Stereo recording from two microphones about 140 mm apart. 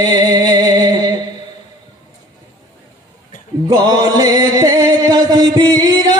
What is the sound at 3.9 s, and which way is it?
Music, 30° right (ahead or behind).